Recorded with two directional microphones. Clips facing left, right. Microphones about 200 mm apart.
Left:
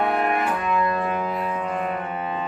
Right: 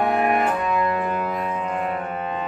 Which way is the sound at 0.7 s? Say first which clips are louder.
Right 1 dB; 15° right (ahead or behind).